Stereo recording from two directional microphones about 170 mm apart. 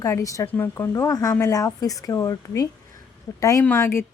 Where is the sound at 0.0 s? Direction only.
20° left (ahead or behind).